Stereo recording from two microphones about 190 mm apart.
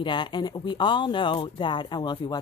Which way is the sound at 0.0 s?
25° left (ahead or behind).